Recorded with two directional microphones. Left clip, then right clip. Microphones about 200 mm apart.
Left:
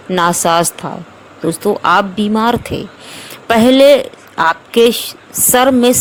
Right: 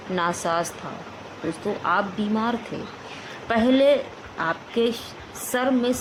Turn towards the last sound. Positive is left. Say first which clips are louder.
# left 13 dB
turn(degrees=55)  # may be behind; listen again after turning